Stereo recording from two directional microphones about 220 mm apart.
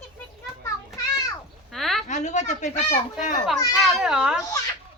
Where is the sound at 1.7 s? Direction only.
Centre (ahead or behind).